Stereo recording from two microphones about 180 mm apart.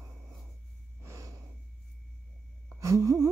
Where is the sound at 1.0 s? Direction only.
15° right (ahead or behind).